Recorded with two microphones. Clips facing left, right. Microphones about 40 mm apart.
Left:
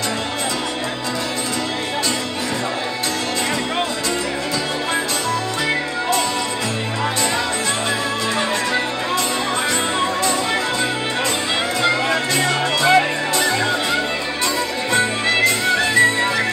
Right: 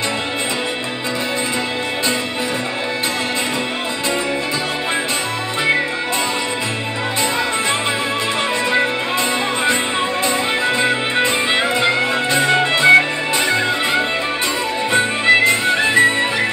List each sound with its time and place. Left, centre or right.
9.7 s music: right
12.4 s music: right